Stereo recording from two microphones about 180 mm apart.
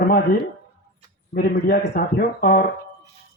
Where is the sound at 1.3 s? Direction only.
55° left (ahead or behind).